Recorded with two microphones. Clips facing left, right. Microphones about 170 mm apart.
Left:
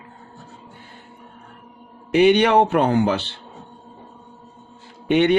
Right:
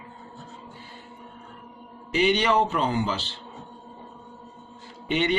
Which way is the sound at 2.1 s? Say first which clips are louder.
Left 7 dB; 55° left (ahead or behind).